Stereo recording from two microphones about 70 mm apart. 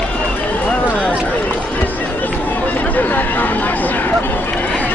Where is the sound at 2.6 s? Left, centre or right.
Left.